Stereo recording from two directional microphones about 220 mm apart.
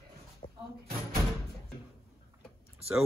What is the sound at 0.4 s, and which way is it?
Cupboard open or close, 35° left (ahead or behind).